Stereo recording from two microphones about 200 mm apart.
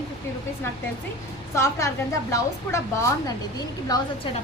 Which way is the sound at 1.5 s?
15° left (ahead or behind).